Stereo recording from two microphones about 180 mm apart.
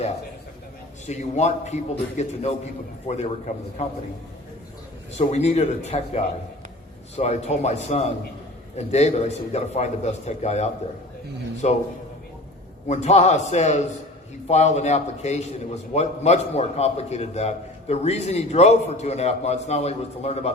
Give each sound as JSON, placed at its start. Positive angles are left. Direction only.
{"t": 1.0, "sound": "a man's voice", "side_deg": 40}
{"t": 5.1, "sound": "a man's voice", "side_deg": 35}
{"t": 12.9, "sound": "a man's voice", "side_deg": 40}